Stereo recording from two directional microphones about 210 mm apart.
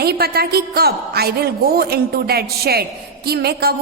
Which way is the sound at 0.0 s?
50° right (ahead or behind).